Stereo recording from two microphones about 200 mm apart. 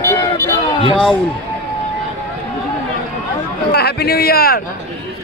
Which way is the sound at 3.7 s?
55° left (ahead or behind).